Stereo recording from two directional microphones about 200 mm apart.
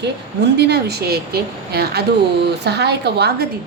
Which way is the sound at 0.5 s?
55° right (ahead or behind).